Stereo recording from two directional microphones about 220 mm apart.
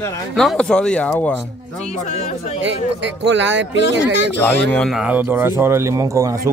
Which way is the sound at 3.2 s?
55° right (ahead or behind).